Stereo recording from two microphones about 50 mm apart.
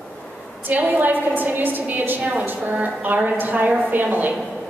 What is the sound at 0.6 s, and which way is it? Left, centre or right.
A woman's voice, right.